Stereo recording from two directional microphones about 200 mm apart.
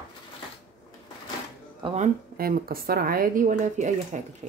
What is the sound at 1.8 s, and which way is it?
Speech, 35° right (ahead or behind).